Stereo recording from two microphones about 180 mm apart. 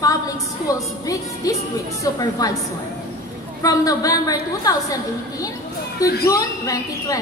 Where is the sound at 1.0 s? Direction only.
20° left (ahead or behind).